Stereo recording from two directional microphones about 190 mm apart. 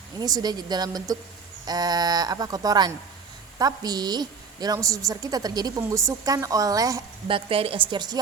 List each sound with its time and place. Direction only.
0.2 s a woman's voice: 20° right (ahead or behind)